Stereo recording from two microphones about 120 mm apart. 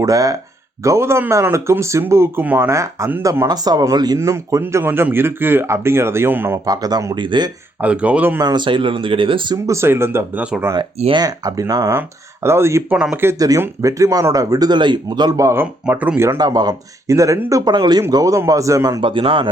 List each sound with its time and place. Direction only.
0.0 s speech: 30° right (ahead or behind)
3.4 s speech: 35° right (ahead or behind); by 6.6 s 20° right (ahead or behind)
6.7 s speech: 30° right (ahead or behind)
7.8 s speech: 10° right (ahead or behind)
8.4 s speech: 35° right (ahead or behind)
9.6 s speech: 20° right (ahead or behind)
10.4 s speech: 10° right (ahead or behind)
11.1 s speech: 35° right (ahead or behind)
15.6 s speech: 15° right (ahead or behind)
16.4 s speech: 35° right (ahead or behind)